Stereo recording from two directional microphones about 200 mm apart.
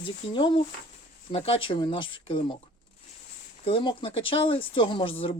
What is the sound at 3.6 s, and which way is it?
Speech, 25° left (ahead or behind).